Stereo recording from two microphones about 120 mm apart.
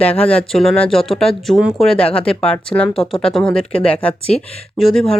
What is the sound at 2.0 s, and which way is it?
Speech, 50° left (ahead or behind).